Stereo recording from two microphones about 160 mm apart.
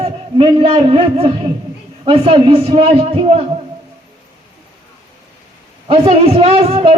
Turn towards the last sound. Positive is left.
turn(degrees=-40)  # may be behind; listen again after turning